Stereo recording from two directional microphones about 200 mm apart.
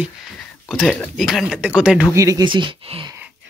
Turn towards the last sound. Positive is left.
turn(degrees=-25)  # may be behind; listen again after turning